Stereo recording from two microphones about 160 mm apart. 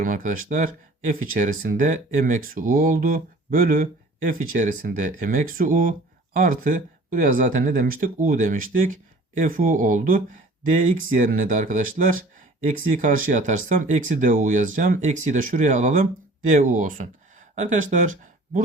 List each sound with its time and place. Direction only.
0.0 s speech: 55° right (ahead or behind)